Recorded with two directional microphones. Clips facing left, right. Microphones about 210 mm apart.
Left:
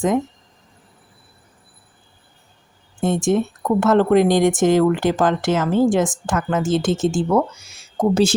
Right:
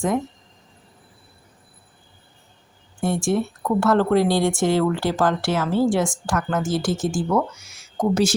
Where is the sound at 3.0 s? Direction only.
20° left (ahead or behind).